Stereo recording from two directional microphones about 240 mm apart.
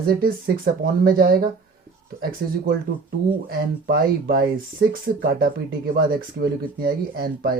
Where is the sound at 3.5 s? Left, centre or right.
Right.